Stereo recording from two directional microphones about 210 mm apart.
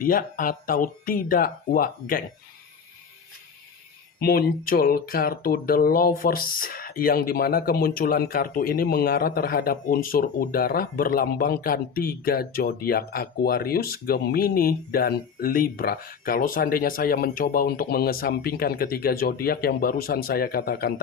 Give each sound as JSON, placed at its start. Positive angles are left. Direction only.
{"t": 0.0, "sound": "speech", "side_deg": 40}
{"t": 4.2, "sound": "speech", "side_deg": 45}